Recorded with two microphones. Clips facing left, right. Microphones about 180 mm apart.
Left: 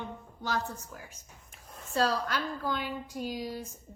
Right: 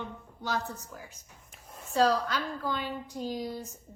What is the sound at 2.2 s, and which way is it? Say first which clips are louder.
A child's voice: even; 15° left (ahead or behind).